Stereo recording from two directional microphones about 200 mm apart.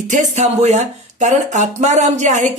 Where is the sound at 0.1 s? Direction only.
35° right (ahead or behind).